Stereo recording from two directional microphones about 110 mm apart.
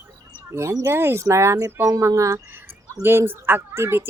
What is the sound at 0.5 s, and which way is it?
Speech, 25° right (ahead or behind).